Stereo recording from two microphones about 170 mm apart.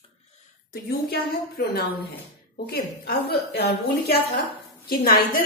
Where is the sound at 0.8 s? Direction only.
70° left (ahead or behind).